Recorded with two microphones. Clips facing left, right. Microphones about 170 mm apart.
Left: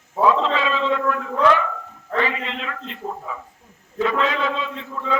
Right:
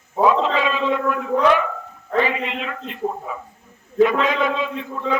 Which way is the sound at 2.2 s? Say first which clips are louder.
Right 3 dB; 15° right (ahead or behind).